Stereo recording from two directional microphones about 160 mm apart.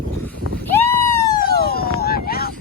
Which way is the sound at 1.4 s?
70° left (ahead or behind).